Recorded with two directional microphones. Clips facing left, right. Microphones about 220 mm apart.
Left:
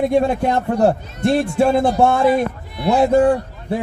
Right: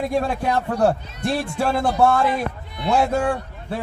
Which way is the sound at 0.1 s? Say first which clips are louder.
Left 5 dB; 20° left (ahead or behind).